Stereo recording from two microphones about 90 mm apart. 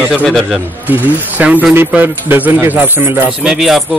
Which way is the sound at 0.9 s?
20° right (ahead or behind).